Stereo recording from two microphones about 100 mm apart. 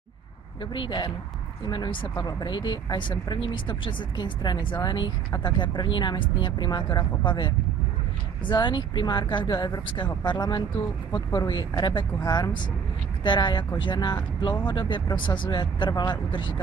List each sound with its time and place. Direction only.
0.7 s speech: 50° left (ahead or behind)